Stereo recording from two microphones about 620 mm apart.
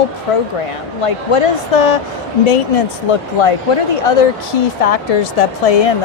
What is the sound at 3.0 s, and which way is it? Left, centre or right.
Speech, left.